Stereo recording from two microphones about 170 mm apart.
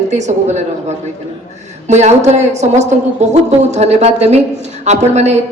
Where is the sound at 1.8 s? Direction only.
40° right (ahead or behind).